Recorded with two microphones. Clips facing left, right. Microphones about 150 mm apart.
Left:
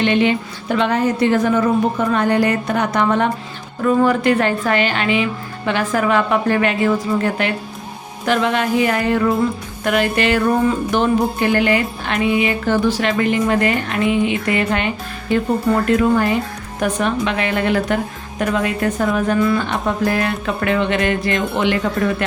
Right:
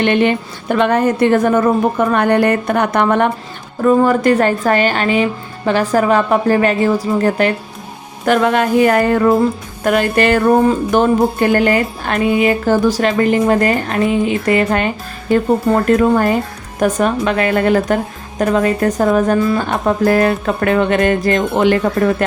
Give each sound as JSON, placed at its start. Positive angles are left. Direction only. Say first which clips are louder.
{"t": 0.0, "sound": "a woman's voice", "louder": "right 2 dB", "side_deg": -50}
{"t": 3.8, "sound": "music", "louder": "right 3 dB", "side_deg": -45}
{"t": 8.2, "sound": "a woman's voice", "louder": "right 4 dB", "side_deg": -50}
{"t": 10.9, "sound": "music", "louder": "right 4 dB", "side_deg": -45}
{"t": 15.3, "sound": "a woman's voice", "louder": "right 4 dB", "side_deg": -45}
{"t": 18.3, "sound": "music", "louder": "right 5 dB", "side_deg": -40}
{"t": 19.5, "sound": "a woman's voice", "louder": "right 4 dB", "side_deg": -45}